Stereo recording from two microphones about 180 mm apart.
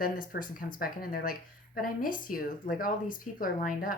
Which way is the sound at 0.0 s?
50° left (ahead or behind).